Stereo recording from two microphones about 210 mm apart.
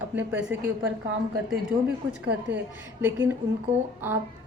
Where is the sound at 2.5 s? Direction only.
10° right (ahead or behind).